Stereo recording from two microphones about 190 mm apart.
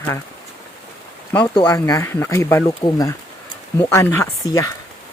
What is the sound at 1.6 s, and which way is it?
Speech, 15° left (ahead or behind).